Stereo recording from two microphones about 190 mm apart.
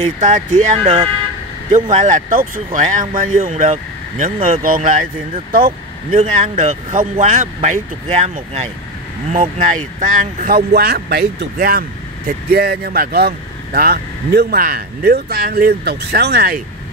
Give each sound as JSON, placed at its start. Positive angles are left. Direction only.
{"t": 0.0, "sound": "speech", "side_deg": -40}
{"t": 4.6, "sound": "speech", "side_deg": -45}
{"t": 6.1, "sound": "speech", "side_deg": -35}